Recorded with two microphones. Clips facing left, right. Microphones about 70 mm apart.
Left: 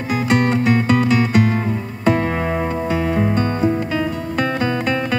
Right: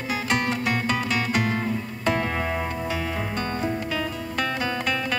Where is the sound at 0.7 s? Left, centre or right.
Centre.